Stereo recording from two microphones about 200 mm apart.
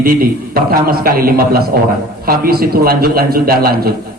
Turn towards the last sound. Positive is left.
turn(degrees=-50)  # may be behind; listen again after turning